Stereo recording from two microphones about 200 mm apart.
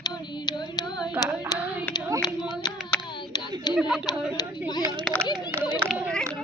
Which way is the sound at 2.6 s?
20° left (ahead or behind).